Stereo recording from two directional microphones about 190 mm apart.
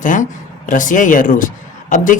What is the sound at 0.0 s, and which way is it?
Speech, 45° left (ahead or behind).